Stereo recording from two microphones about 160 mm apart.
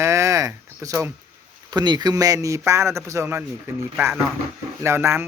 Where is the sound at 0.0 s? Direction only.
20° right (ahead or behind).